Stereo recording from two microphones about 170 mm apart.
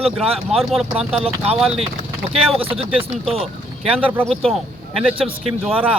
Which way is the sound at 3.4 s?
5° right (ahead or behind).